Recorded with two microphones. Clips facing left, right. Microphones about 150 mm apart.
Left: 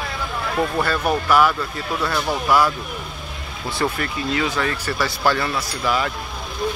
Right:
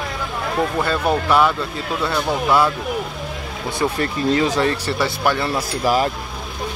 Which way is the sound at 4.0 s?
35° right (ahead or behind).